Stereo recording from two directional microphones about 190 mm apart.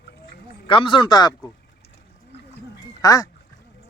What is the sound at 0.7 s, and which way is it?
Speech, 25° left (ahead or behind).